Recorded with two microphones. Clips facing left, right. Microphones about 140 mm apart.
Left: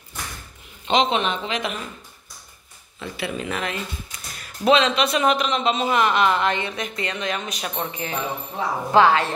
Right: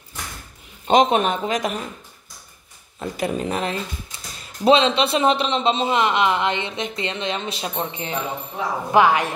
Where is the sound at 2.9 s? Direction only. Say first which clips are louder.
Right 5 dB; 40° right (ahead or behind).